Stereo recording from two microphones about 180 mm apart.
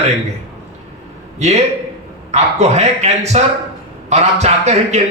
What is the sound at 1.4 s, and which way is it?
A man's voice, 40° right (ahead or behind).